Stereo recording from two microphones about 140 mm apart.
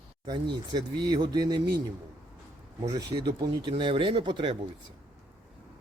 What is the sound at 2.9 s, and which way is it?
Speech, 30° right (ahead or behind).